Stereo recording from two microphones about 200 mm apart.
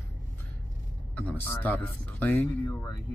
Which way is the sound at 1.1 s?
10° left (ahead or behind).